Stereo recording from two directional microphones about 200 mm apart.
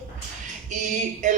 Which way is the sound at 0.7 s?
40° right (ahead or behind).